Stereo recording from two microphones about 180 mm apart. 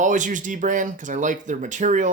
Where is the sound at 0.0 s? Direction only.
45° right (ahead or behind).